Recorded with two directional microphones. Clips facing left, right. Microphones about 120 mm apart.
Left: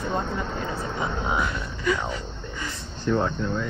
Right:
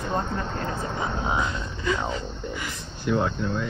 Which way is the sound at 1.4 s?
25° right (ahead or behind).